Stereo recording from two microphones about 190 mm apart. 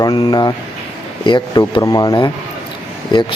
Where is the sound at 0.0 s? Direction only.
25° left (ahead or behind).